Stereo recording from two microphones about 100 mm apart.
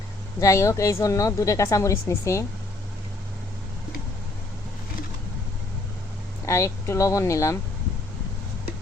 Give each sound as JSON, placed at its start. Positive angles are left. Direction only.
{"t": 0.3, "sound": "speech", "side_deg": 30}
{"t": 6.4, "sound": "speech", "side_deg": 30}